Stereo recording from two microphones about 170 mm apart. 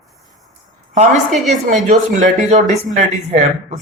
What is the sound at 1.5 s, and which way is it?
Speech, 45° right (ahead or behind).